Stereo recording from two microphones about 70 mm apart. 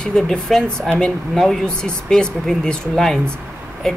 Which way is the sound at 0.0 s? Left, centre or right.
Centre.